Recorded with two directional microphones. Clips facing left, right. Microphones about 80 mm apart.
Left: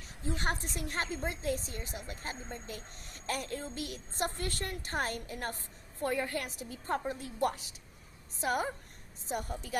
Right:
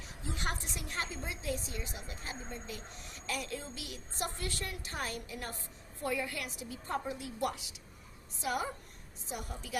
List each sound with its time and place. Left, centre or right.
0.3 s a woman's voice: left